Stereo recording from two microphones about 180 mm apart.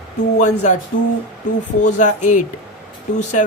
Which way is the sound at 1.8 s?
45° left (ahead or behind).